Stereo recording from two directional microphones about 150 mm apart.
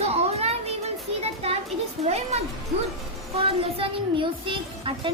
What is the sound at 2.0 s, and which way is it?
A woman's voice, 45° right (ahead or behind).